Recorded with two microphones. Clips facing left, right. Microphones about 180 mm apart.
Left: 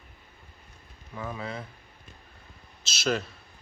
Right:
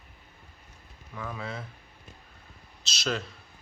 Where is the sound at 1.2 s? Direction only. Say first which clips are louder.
Left 2 dB; 20° left (ahead or behind).